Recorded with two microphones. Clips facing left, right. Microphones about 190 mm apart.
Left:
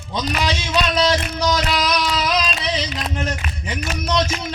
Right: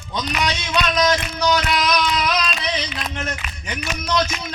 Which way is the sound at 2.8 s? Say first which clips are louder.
Left 2 dB; 35° left (ahead or behind).